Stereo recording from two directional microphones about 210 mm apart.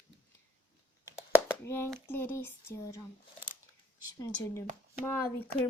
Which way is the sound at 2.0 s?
10° left (ahead or behind).